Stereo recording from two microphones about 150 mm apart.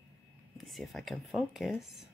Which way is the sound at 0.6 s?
Centre (ahead or behind).